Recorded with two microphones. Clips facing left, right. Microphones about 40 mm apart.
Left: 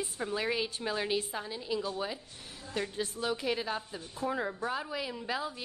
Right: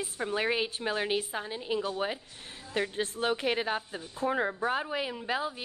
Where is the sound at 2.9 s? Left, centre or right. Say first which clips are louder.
Right 4 dB; right.